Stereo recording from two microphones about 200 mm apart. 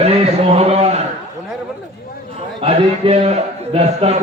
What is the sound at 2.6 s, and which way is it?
A man's voice, 30° right (ahead or behind).